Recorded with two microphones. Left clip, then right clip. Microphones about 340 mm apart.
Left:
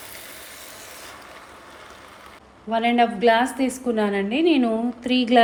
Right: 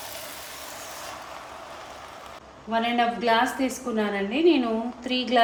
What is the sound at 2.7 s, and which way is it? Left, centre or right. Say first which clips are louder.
A woman's voice: left 4 dB; left.